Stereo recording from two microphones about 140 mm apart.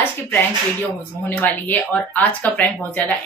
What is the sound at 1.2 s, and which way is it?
Speech, 15° left (ahead or behind).